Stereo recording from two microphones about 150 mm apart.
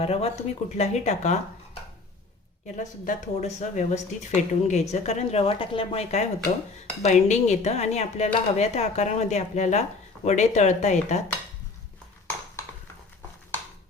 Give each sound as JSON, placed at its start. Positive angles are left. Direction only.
{"t": 0.0, "sound": "a woman's voice", "side_deg": 45}
{"t": 2.7, "sound": "a woman's voice", "side_deg": 60}